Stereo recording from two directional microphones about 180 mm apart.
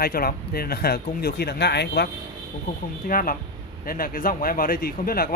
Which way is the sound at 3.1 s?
50° left (ahead or behind).